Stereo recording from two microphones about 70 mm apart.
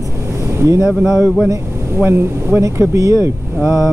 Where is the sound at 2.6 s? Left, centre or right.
Right.